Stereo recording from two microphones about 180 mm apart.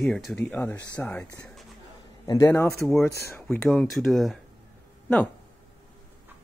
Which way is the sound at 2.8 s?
Centre (ahead or behind).